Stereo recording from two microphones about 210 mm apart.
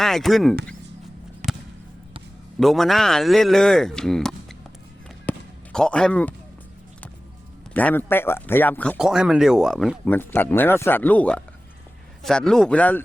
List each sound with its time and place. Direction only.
0.0 s speech: centre (ahead or behind)
1.4 s basketball bounce: 35° right (ahead or behind)
2.6 s speech: centre (ahead or behind)
5.3 s basketball bounce: 10° left (ahead or behind)
5.7 s speech: 5° left (ahead or behind)
7.7 s speech: 10° left (ahead or behind)
10.1 s speech: 10° left (ahead or behind)